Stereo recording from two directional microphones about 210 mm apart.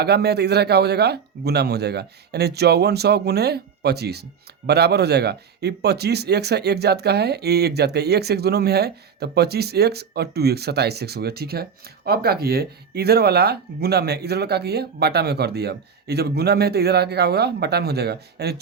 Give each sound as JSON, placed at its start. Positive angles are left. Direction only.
{"t": 0.0, "sound": "speech", "side_deg": -50}